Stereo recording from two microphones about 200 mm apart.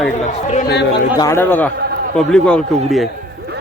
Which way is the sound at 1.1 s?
15° left (ahead or behind).